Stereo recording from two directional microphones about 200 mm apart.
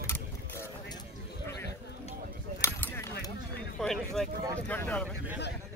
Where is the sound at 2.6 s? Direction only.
15° left (ahead or behind).